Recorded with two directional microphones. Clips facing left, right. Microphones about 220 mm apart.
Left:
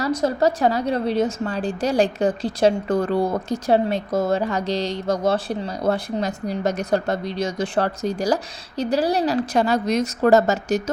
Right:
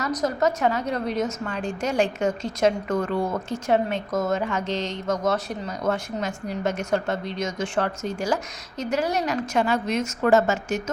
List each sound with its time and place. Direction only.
0.0 s a woman's voice: 30° left (ahead or behind)